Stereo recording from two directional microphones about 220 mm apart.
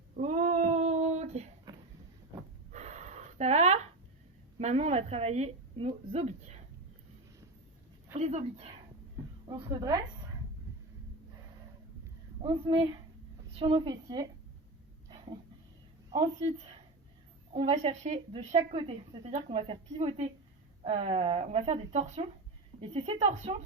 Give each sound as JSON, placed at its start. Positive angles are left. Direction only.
{"t": 0.2, "sound": "child singing", "side_deg": -30}
{"t": 2.7, "sound": "a sound", "side_deg": -30}
{"t": 4.5, "sound": "a woman's voice", "side_deg": -30}
{"t": 8.1, "sound": "speech", "side_deg": -30}
{"t": 9.6, "sound": "a woman's voice", "side_deg": -15}
{"t": 12.4, "sound": "a woman's voice", "side_deg": -20}
{"t": 15.1, "sound": "a sound", "side_deg": -25}
{"t": 16.0, "sound": "a woman's voice", "side_deg": -20}